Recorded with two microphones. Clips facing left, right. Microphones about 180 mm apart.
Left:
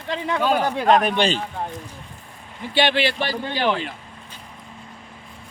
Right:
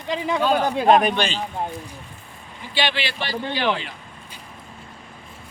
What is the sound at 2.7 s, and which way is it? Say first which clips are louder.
Speech: left 5 dB; 50° left (ahead or behind).